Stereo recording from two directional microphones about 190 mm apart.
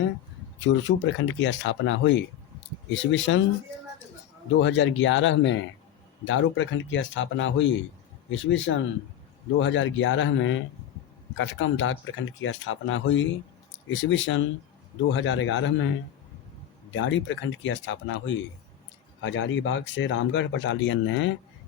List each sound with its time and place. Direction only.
0.6 s speech: 80° left
4.6 s speech: 80° left
6.2 s speech: 90° left
16.9 s speech: 75° left (ahead or behind)